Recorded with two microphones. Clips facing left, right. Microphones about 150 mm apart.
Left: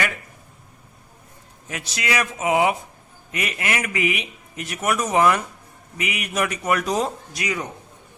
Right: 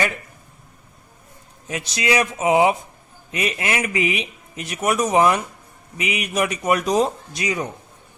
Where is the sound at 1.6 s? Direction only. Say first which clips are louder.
Right 5 dB; 20° right (ahead or behind).